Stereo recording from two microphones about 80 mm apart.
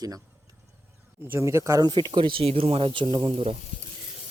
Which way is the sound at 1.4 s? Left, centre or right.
Right.